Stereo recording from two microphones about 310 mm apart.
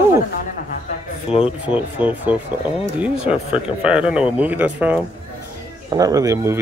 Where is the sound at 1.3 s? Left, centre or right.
Centre.